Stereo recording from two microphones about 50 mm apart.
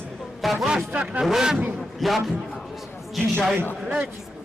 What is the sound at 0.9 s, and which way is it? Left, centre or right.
Speech, right.